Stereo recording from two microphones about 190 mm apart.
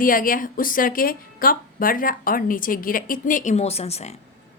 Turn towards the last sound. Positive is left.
turn(degrees=35)  # may be behind; listen again after turning